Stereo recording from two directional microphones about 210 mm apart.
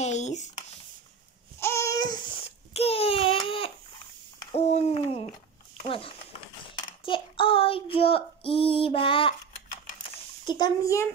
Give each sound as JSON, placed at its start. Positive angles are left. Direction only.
{"t": 0.0, "sound": "a sound", "side_deg": 35}
{"t": 1.6, "sound": "babbling", "side_deg": 15}
{"t": 4.5, "sound": "owl", "side_deg": 30}
{"t": 5.8, "sound": "a sound", "side_deg": 25}
{"t": 6.7, "sound": "child singing", "side_deg": 25}
{"t": 10.4, "sound": "a child's voice", "side_deg": 20}